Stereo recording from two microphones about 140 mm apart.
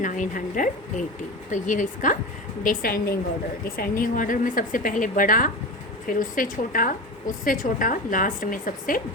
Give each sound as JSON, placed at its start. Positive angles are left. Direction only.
{"t": 0.0, "sound": "a woman's voice", "side_deg": 65}
{"t": 2.6, "sound": "a woman's voice", "side_deg": 90}